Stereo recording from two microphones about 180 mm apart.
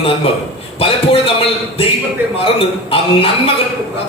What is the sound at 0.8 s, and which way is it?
A man's voice, 30° left (ahead or behind).